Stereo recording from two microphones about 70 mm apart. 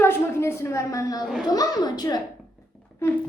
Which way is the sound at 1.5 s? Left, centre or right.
Left.